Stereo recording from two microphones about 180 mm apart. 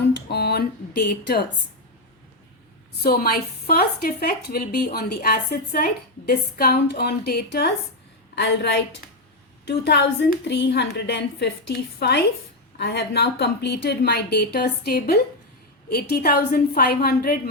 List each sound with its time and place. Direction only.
0.0 s a woman's voice: 65° left (ahead or behind)
3.0 s a woman's voice: 55° left (ahead or behind)